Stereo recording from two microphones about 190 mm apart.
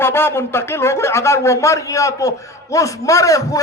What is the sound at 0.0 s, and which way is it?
A man's voice, 10° left (ahead or behind).